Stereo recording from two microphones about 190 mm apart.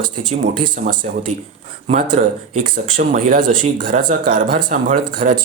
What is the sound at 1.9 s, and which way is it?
Speech, 45° right (ahead or behind).